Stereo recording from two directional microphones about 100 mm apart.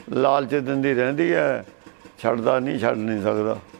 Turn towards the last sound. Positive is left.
turn(degrees=-15)  # may be behind; listen again after turning